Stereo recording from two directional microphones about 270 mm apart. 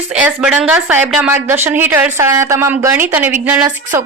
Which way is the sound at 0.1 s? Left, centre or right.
Centre.